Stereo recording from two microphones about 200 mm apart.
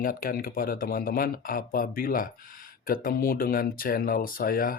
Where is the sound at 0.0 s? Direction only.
45° left (ahead or behind).